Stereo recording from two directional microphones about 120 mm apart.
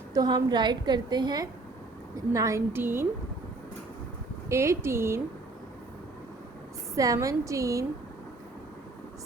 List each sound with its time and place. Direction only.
0.1 s a woman's voice: 35° right (ahead or behind)
4.4 s a woman's voice: 25° right (ahead or behind)
6.9 s a woman's voice: 30° right (ahead or behind)